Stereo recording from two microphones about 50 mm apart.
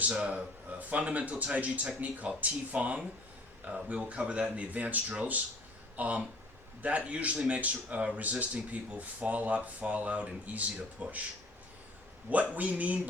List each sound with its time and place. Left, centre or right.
0.0 s speech: right
12.3 s speech: right